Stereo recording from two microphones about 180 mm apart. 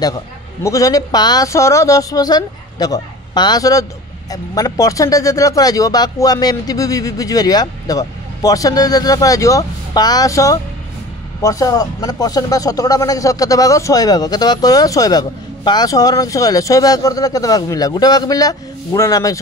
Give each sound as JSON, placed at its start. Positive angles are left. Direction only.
{"t": 0.7, "sound": "speech", "side_deg": 20}